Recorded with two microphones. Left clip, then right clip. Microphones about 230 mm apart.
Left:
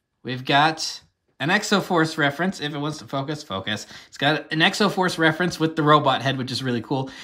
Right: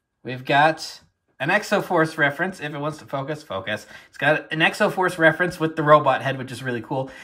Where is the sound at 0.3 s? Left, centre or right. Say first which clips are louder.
Right 1 dB; centre.